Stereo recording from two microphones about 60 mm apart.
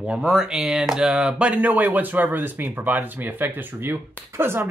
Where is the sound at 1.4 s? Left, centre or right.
Right.